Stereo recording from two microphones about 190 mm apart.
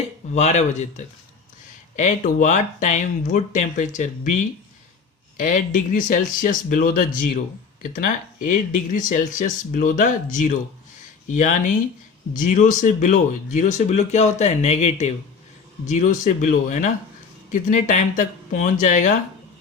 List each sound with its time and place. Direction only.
0.3 s speech: 35° left (ahead or behind)